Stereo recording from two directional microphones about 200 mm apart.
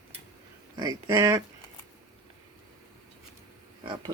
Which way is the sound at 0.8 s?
15° right (ahead or behind).